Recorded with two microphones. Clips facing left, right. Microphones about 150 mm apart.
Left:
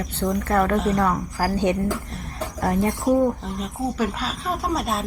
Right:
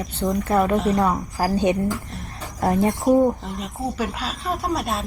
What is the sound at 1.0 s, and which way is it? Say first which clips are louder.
A woman's voice: right 1 dB; 15° right (ahead or behind).